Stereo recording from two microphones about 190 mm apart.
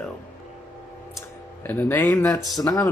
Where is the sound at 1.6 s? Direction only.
10° left (ahead or behind).